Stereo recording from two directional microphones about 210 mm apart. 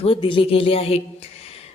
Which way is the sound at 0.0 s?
25° left (ahead or behind).